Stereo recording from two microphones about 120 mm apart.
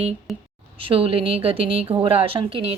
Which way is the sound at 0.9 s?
50° right (ahead or behind).